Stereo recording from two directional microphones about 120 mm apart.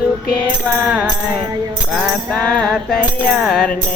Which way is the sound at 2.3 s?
10° left (ahead or behind).